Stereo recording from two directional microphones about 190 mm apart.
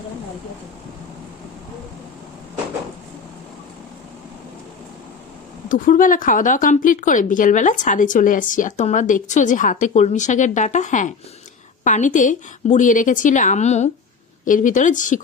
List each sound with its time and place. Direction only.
5.6 s a woman's voice: 45° left (ahead or behind)